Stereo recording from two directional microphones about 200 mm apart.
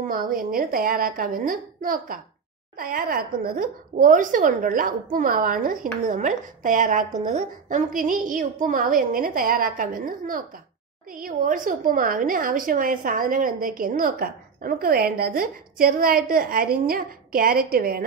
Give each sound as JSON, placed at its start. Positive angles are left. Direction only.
{"t": 0.0, "sound": "a woman's voice", "side_deg": -45}